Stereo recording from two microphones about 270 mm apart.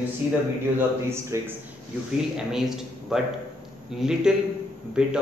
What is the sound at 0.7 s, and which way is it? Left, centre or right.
A man's voice, centre.